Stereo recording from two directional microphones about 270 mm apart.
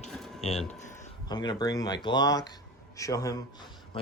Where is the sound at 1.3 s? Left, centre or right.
Centre.